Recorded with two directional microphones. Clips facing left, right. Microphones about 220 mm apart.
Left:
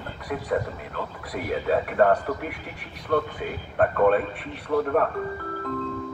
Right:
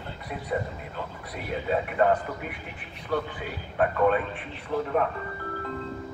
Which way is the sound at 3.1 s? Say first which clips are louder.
Left 4 dB; 55° left (ahead or behind).